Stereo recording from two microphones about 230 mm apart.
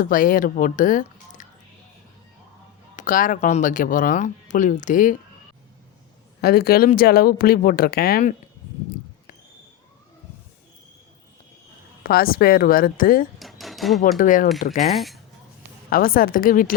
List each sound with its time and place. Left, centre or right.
0.0 s speech: left
2.9 s speech: left
6.4 s speech: left
12.0 s speech: left
13.4 s drawer open or close: centre
14.2 s speech: left
14.9 s speech: centre
15.9 s speech: left